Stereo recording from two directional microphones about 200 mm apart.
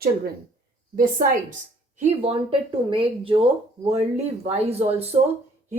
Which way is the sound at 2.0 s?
30° right (ahead or behind).